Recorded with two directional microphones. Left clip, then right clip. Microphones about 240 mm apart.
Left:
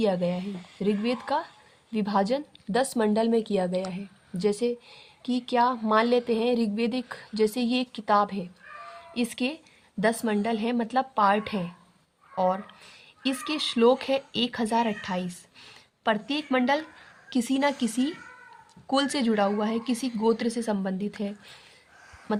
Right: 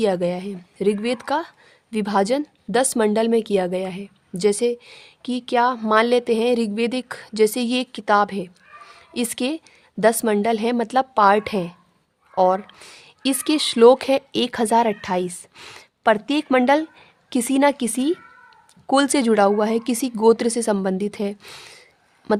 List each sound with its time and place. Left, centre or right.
0.0 s a woman's voice: right